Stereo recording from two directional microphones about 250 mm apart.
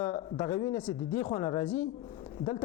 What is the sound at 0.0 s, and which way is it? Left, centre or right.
Speech, centre.